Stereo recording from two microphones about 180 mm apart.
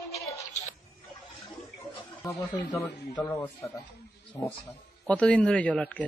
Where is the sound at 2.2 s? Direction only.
20° left (ahead or behind).